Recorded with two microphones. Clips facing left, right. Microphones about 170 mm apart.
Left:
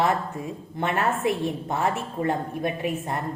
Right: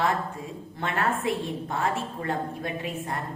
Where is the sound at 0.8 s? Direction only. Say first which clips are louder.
Left 3 dB; 20° left (ahead or behind).